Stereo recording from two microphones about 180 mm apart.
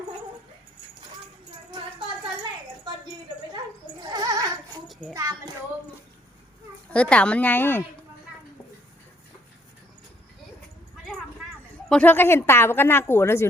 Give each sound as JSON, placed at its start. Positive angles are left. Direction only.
{"t": 4.1, "sound": "goat", "side_deg": -20}
{"t": 4.9, "sound": "children playing", "side_deg": 0}
{"t": 5.1, "sound": "child singing", "side_deg": -15}
{"t": 6.9, "sound": "speech", "side_deg": 5}
{"t": 11.9, "sound": "speech", "side_deg": 10}